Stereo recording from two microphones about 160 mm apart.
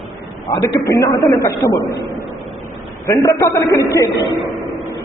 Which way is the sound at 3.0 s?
20° left (ahead or behind).